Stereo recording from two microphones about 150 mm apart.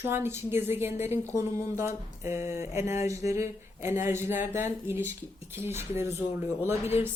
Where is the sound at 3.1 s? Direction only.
20° right (ahead or behind).